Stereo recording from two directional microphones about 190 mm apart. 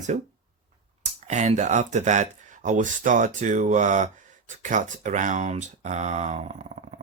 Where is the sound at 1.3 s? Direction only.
40° right (ahead or behind).